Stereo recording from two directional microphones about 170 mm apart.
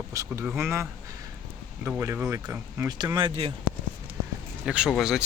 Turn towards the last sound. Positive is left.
turn(degrees=0)  # may be behind; listen again after turning